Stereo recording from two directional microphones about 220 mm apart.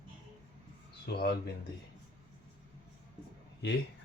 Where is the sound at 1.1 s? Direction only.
45° left (ahead or behind).